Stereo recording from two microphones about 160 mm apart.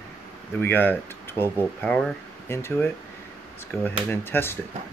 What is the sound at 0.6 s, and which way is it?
Speech, 10° left (ahead or behind).